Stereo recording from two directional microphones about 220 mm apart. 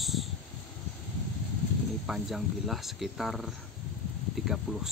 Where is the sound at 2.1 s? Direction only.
Centre (ahead or behind).